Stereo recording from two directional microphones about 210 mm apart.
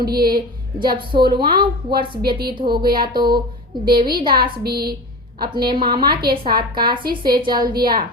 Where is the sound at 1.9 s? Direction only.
45° right (ahead or behind).